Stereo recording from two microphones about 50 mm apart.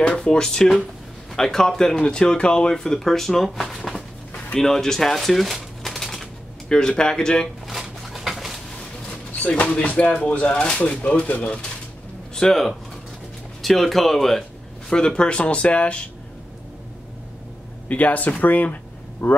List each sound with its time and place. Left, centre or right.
0.1 s speech: centre
5.9 s typewriter: centre
6.7 s speech: centre
8.0 s a sound: centre
9.3 s speech: left
12.4 s speech: centre; by 16.1 s left
17.8 s speech: left